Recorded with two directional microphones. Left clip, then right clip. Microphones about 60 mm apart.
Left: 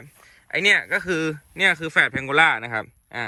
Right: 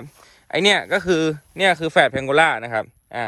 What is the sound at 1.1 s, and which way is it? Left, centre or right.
Speech, right.